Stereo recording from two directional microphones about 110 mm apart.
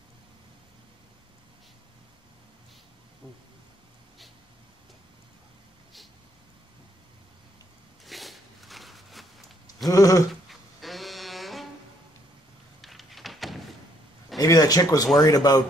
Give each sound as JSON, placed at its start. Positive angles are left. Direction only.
{"t": 8.0, "sound": "zipper", "side_deg": 0}
{"t": 9.8, "sound": "speech", "side_deg": 30}
{"t": 10.5, "sound": "a sound", "side_deg": 0}
{"t": 12.8, "sound": "door", "side_deg": 0}
{"t": 14.4, "sound": "speech", "side_deg": 35}